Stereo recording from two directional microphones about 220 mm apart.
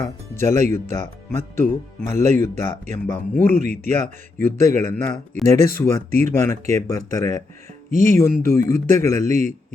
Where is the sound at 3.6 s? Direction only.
35° right (ahead or behind).